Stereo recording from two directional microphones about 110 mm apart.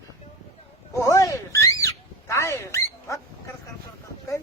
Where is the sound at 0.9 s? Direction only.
30° left (ahead or behind).